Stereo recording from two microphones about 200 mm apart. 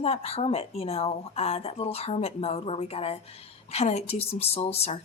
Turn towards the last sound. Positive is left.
turn(degrees=30)  # may be behind; listen again after turning